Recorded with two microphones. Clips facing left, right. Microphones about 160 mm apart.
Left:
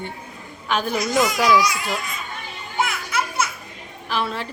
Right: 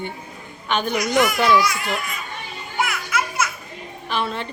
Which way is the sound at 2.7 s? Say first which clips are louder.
Even; 25° left (ahead or behind).